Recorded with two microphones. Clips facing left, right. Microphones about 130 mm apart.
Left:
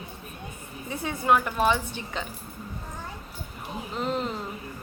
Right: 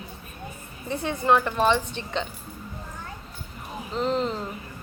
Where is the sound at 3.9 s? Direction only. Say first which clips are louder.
Right 4 dB; 5° left (ahead or behind).